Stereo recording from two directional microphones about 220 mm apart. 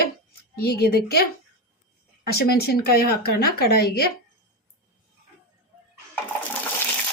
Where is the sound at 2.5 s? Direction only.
45° left (ahead or behind).